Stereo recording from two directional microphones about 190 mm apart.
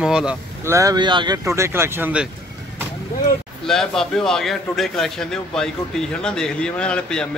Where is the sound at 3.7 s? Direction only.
Centre (ahead or behind).